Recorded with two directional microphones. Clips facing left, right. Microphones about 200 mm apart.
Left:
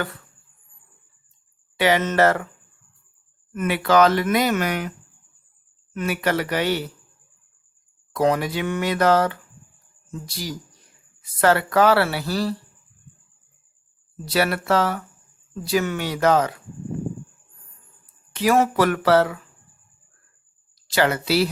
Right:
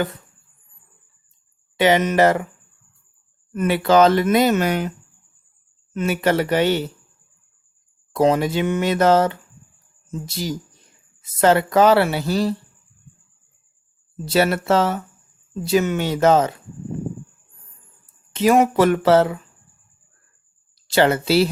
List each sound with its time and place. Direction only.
1.7 s speech: 20° right (ahead or behind)
3.5 s speech: 30° right (ahead or behind)
8.1 s speech: 25° right (ahead or behind)
14.3 s speech: 25° right (ahead or behind)
18.0 s speech: 20° right (ahead or behind)
20.9 s speech: 25° right (ahead or behind)